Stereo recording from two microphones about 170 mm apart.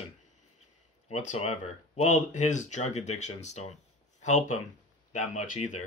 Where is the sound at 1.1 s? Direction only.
40° left (ahead or behind).